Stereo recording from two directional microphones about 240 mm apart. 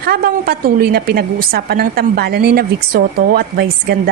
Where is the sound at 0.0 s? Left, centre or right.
Right.